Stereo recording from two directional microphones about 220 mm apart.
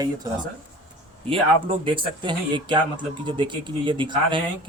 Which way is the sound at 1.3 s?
25° right (ahead or behind).